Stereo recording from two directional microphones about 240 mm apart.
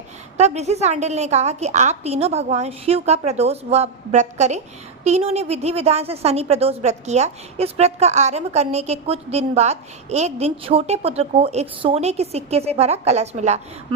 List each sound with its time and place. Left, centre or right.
0.3 s a woman's voice: right